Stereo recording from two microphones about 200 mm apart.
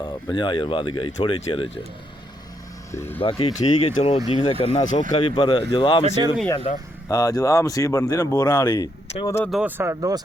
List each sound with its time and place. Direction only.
0.0 s speech: 20° left (ahead or behind)
2.9 s speech: 10° left (ahead or behind)
3.2 s speech: 25° left (ahead or behind)
9.4 s speech: centre (ahead or behind)